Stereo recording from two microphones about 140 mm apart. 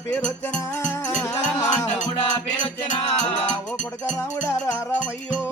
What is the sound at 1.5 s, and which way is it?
Music, 20° left (ahead or behind).